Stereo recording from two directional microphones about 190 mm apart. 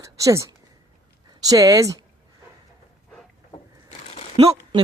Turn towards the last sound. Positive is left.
turn(degrees=-30)  # may be behind; listen again after turning